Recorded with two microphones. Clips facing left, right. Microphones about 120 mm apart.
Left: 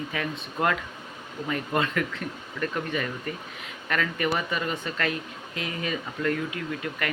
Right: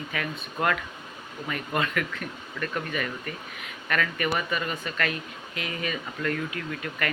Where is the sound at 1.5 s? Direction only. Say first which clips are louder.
Left 2 dB; 25° left (ahead or behind).